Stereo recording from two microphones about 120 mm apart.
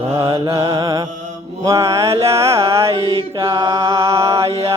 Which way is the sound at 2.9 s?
45° right (ahead or behind).